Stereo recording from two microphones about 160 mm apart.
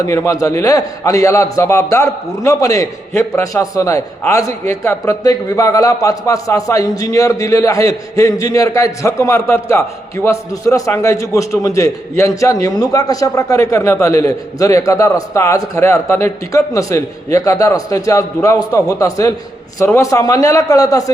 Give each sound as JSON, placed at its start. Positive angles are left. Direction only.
{"t": 0.0, "sound": "a man's voice", "side_deg": 20}